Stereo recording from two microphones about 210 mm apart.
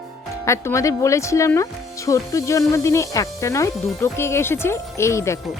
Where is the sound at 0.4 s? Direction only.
15° left (ahead or behind).